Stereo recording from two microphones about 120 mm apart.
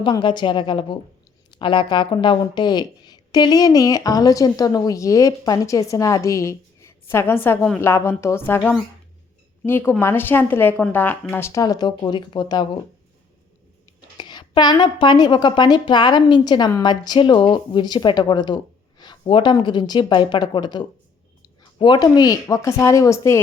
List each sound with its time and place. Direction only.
0.0 s a woman's voice: 40° left (ahead or behind); by 11.6 s 20° left (ahead or behind)
11.6 s a woman's voice: 35° left (ahead or behind)
14.2 s a woman's voice: 40° left (ahead or behind)